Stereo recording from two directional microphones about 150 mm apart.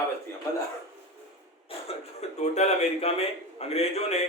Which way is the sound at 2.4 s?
45° left (ahead or behind).